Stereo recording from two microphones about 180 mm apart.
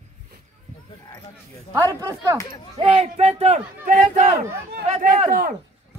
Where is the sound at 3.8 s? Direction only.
45° right (ahead or behind).